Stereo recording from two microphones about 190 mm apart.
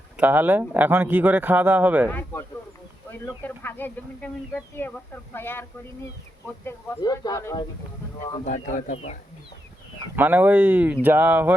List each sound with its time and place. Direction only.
0.2 s speech: 10° right (ahead or behind)
2.0 s speech: 10° left (ahead or behind)
6.7 s speech: 15° left (ahead or behind)
8.4 s speech: 40° left (ahead or behind)
10.2 s speech: 10° right (ahead or behind)